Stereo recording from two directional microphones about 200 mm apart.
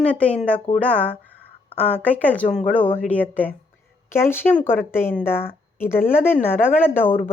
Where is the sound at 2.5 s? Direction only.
35° left (ahead or behind).